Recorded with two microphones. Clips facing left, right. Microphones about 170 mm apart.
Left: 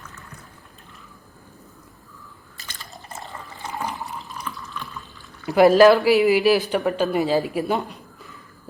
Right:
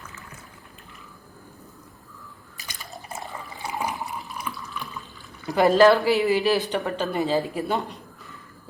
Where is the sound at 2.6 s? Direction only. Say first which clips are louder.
Even; 15° right (ahead or behind).